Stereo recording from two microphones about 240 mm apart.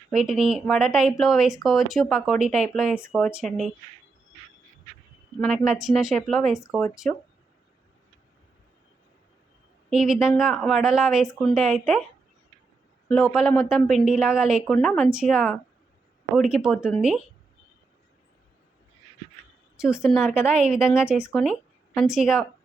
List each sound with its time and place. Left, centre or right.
0.2 s a woman's voice: centre
5.4 s a woman's voice: centre
9.9 s a woman's voice: centre
13.1 s a woman's voice: centre
19.7 s a woman's voice: centre